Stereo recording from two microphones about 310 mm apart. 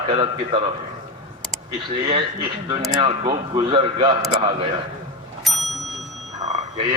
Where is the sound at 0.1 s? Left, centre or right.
Centre.